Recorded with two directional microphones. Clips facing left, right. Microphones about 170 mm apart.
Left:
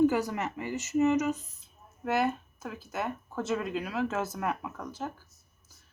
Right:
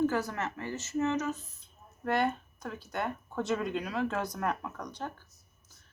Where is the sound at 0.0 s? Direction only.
15° left (ahead or behind).